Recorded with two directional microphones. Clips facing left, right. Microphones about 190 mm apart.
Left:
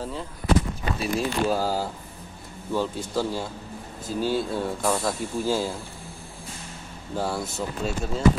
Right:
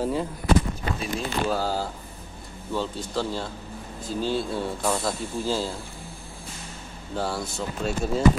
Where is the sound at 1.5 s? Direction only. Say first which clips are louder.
Left 1 dB; 10° left (ahead or behind).